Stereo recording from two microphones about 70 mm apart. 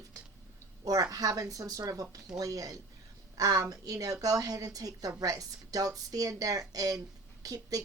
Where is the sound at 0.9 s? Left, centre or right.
Right.